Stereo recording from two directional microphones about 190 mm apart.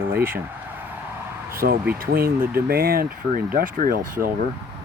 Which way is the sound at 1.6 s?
60° right (ahead or behind).